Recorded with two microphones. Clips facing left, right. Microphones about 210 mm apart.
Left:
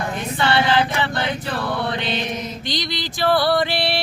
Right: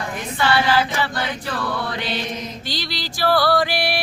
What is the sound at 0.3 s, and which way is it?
Choir, 25° left (ahead or behind).